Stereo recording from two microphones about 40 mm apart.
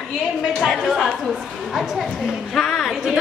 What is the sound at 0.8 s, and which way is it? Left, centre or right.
Speech, centre.